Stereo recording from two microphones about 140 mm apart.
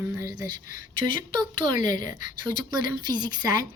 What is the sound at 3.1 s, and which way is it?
Speech, 30° right (ahead or behind).